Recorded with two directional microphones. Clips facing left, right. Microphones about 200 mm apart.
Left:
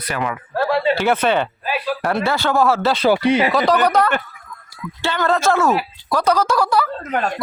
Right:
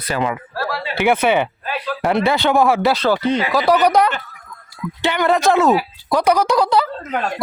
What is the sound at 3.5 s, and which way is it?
Speech, 10° right (ahead or behind).